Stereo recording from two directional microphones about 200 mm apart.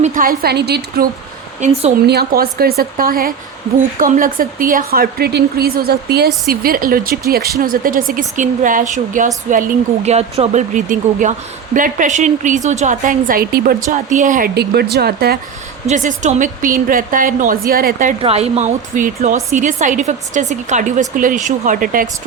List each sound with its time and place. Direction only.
0.0 s speech: 40° right (ahead or behind)
2.0 s speech: 50° right (ahead or behind)
15.9 s speech: 40° right (ahead or behind)
18.2 s speech: 30° right (ahead or behind)